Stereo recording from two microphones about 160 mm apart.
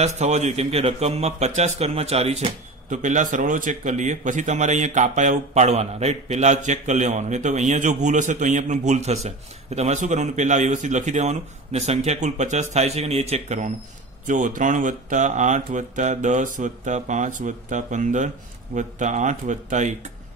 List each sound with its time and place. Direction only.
0.0 s a man's voice: 45° right (ahead or behind)